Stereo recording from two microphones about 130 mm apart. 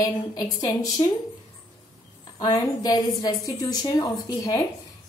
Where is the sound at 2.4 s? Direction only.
30° left (ahead or behind).